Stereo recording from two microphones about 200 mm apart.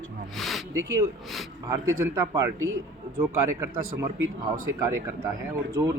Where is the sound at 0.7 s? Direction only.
15° right (ahead or behind).